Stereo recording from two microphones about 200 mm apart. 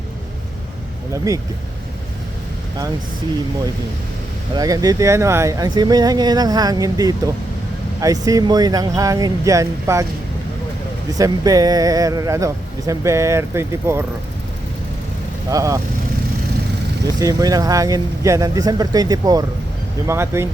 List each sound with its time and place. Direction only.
1.1 s speech: 15° right (ahead or behind)
4.5 s speech: 20° right (ahead or behind)
11.2 s speech: 15° right (ahead or behind)
15.4 s speech: 15° right (ahead or behind)
17.2 s speech: 15° right (ahead or behind)